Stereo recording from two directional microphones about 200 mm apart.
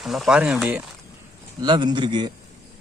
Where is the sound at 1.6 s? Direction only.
20° right (ahead or behind).